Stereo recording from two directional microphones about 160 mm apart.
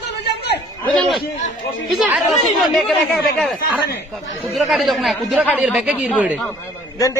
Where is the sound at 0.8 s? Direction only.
5° left (ahead or behind).